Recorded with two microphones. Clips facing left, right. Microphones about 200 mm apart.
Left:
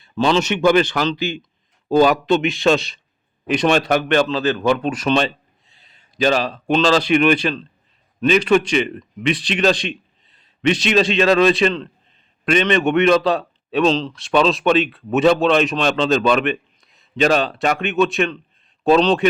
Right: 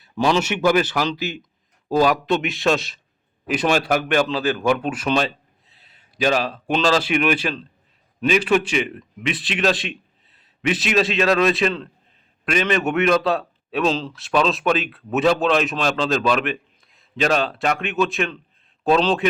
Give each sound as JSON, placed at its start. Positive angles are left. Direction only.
{"t": 0.0, "sound": "a man's voice", "side_deg": -10}